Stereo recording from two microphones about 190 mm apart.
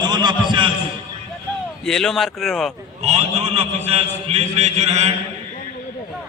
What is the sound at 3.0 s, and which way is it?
A man's voice, 35° right (ahead or behind).